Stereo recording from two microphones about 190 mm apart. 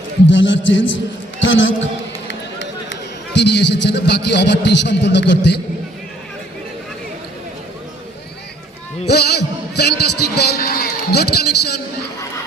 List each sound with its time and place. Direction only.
0.3 s a man's voice: 75° left (ahead or behind)
2.9 s a man's voice: 65° left (ahead or behind)
9.0 s a man's voice: 60° left (ahead or behind)